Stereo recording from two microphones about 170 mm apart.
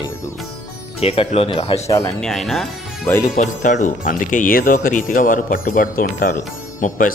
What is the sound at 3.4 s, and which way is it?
Speech, 45° left (ahead or behind).